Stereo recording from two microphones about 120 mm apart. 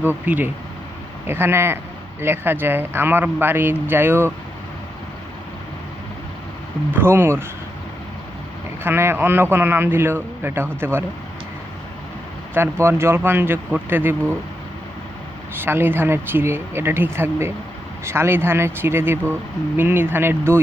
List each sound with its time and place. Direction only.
0.0 s speech: 15° right (ahead or behind)
6.9 s speech: 20° right (ahead or behind)
8.8 s speech: 20° right (ahead or behind)
12.5 s speech: 20° right (ahead or behind)
15.5 s speech: 20° right (ahead or behind)